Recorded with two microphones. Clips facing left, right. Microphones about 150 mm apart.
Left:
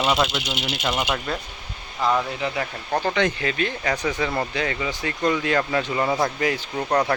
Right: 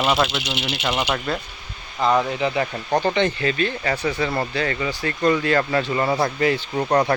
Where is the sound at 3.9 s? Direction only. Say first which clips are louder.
Right 1 dB; 10° right (ahead or behind).